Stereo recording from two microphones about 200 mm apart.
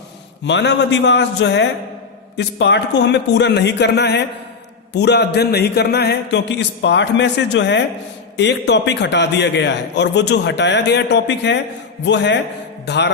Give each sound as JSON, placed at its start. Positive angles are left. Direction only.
{"t": 0.4, "sound": "a man's voice", "side_deg": 60}
{"t": 12.8, "sound": "music", "side_deg": 60}